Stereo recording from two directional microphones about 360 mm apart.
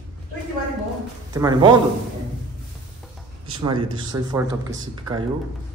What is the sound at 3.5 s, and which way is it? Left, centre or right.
Speech, centre.